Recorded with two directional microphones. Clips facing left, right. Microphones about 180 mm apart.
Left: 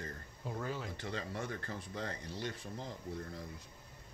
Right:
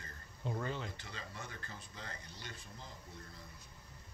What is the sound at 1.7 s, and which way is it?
Speech, 70° left (ahead or behind).